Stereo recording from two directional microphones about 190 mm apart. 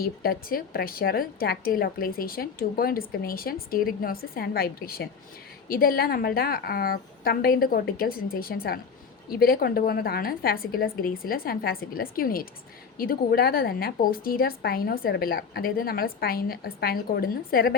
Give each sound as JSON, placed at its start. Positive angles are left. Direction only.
{"t": 0.0, "sound": "a woman's voice", "side_deg": 50}